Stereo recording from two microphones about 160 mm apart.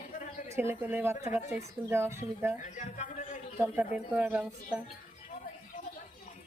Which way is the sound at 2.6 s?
50° left (ahead or behind).